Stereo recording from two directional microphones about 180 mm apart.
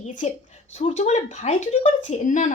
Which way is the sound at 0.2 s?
40° left (ahead or behind).